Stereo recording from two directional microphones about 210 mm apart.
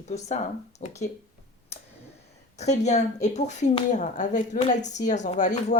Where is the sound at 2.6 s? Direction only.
35° left (ahead or behind).